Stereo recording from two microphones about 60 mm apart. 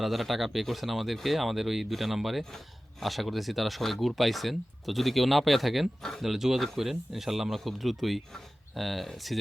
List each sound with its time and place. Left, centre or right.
0.0 s speech: centre
6.2 s speech: centre